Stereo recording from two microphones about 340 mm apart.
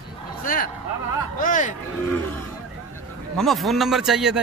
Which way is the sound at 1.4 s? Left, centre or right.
Left.